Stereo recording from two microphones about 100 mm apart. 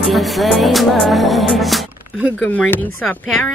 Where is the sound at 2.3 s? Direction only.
15° left (ahead or behind).